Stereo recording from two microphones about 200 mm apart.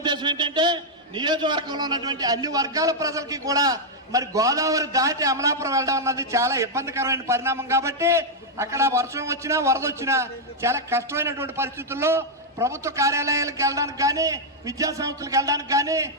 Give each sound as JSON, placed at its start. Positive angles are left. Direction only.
{"t": 0.0, "sound": "a man's voice", "side_deg": -20}